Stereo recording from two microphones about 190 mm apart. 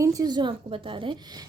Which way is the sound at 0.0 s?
20° right (ahead or behind).